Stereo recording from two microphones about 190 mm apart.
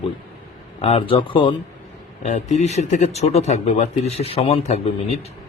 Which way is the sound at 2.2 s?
40° left (ahead or behind).